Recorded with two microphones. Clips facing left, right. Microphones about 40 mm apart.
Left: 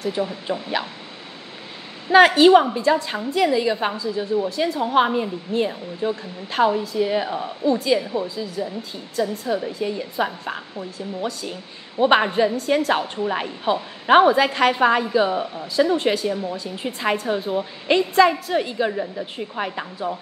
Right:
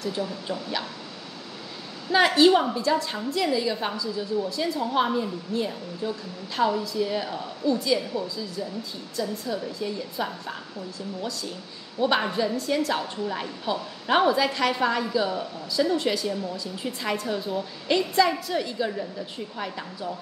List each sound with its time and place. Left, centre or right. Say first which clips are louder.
0.0 s a woman's voice: left 5 dB; left
2.0 s a woman's voice: left 6 dB; left